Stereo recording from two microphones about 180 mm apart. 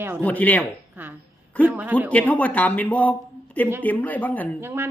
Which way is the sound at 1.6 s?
10° left (ahead or behind).